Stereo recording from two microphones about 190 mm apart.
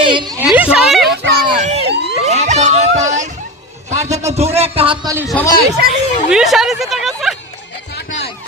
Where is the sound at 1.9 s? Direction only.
65° right (ahead or behind).